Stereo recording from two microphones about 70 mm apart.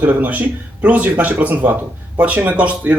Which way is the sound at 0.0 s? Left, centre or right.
Right.